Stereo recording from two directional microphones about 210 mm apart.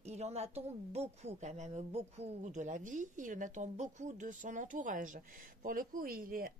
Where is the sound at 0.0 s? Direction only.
30° right (ahead or behind).